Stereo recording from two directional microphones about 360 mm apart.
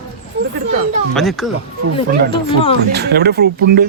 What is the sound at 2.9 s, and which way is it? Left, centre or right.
Speech, right.